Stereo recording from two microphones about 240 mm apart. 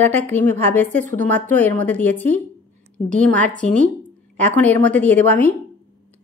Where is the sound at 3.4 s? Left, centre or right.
Right.